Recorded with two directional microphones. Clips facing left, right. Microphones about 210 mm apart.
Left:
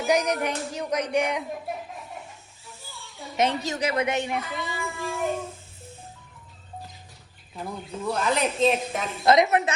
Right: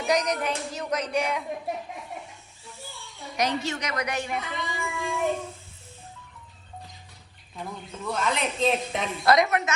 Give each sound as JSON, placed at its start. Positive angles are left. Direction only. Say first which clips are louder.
{"t": 0.0, "sound": "speech", "louder": "left 2 dB", "side_deg": 10}
{"t": 3.3, "sound": "a woman's voice", "louder": "left 2 dB", "side_deg": 30}
{"t": 4.4, "sound": "a woman's voice", "louder": "left 1 dB", "side_deg": 0}
{"t": 7.5, "sound": "a woman's voice", "louder": "left 3 dB", "side_deg": 0}
{"t": 9.2, "sound": "a woman's voice", "louder": "left 2 dB", "side_deg": 20}